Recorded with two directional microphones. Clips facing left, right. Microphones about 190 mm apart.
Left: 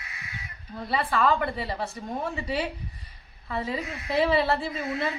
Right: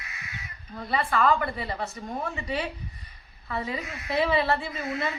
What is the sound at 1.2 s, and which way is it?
Speech, 30° left (ahead or behind).